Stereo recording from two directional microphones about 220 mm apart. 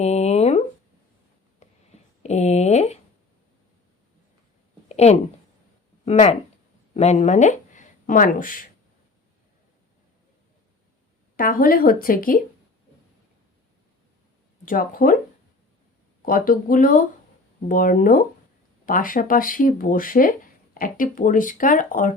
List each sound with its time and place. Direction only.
0.0 s a sound: 30° left (ahead or behind)
4.9 s a sound: 30° left (ahead or behind)
6.1 s speech: 30° left (ahead or behind)
11.3 s speech: 40° left (ahead or behind)
14.6 s speech: 40° left (ahead or behind)
16.2 s speech: 40° left (ahead or behind)